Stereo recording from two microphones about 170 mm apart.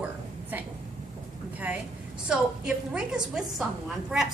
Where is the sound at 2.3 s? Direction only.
5° right (ahead or behind).